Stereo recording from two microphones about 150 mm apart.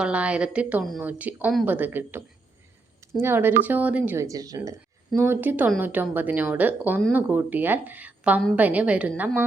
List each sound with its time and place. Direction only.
0.0 s speech: 10° right (ahead or behind)